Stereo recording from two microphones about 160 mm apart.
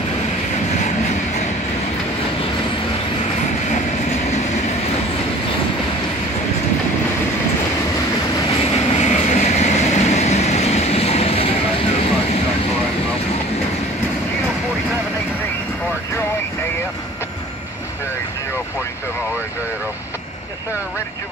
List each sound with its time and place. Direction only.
8.5 s vehicle: 40° left (ahead or behind)